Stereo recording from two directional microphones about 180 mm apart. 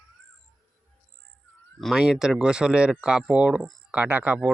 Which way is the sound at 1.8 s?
Centre (ahead or behind).